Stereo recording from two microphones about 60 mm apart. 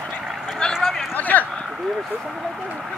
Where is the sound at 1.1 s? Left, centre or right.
Left.